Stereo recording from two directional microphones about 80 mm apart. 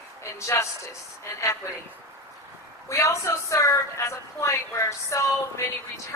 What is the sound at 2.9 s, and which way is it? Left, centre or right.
Speech, left.